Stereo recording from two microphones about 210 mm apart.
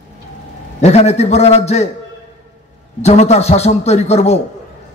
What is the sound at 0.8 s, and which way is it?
A man's voice, 30° left (ahead or behind).